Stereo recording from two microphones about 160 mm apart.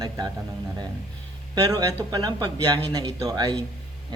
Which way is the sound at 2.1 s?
25° right (ahead or behind).